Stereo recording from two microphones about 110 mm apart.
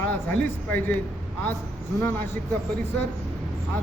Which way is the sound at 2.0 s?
20° left (ahead or behind).